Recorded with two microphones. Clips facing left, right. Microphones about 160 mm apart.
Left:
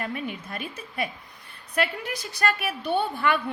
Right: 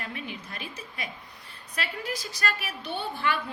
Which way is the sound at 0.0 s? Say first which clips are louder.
Left 6 dB; 45° left (ahead or behind).